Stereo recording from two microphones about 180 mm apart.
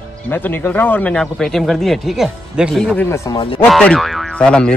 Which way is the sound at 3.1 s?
15° left (ahead or behind).